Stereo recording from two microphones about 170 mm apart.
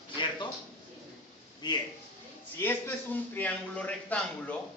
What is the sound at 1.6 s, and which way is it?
Speech, 25° left (ahead or behind).